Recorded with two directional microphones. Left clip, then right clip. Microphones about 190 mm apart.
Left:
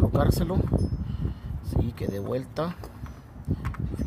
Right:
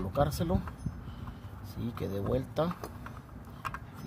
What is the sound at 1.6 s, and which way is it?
Speech, 5° left (ahead or behind).